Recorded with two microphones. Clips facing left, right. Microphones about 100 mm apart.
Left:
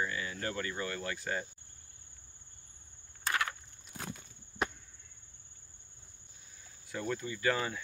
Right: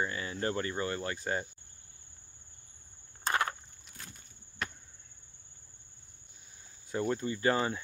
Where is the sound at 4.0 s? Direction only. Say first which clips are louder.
Left 8 dB; 85° left.